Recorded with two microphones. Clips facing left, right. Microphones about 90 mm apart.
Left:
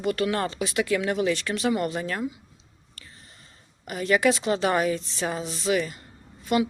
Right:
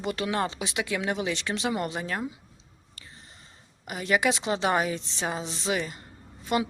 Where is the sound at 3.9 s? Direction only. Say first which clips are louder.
Left 3 dB; 15° right (ahead or behind).